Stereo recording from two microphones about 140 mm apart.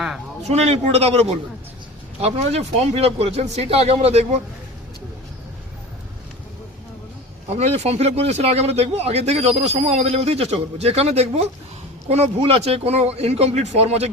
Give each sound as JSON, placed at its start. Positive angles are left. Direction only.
{"t": 0.4, "sound": "speech", "side_deg": -50}
{"t": 7.5, "sound": "speech", "side_deg": -50}